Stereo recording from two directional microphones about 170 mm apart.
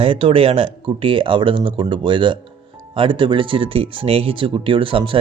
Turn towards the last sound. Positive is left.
turn(degrees=-30)  # may be behind; listen again after turning